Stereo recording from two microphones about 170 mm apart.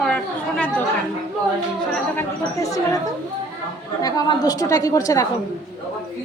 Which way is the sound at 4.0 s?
25° left (ahead or behind).